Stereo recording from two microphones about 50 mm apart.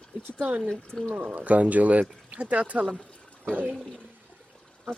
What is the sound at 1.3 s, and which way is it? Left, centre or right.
Speech, right.